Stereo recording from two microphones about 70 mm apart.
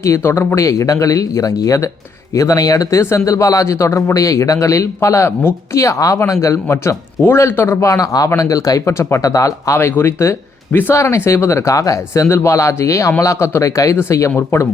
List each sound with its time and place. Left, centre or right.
0.0 s speech: left
5.8 s a man's voice: left
7.8 s speech: left
9.0 s a man's voice: left
9.2 s speech: left
9.9 s a man's voice: left
10.2 s a sound: left
10.9 s speech: left
12.3 s a man's voice: left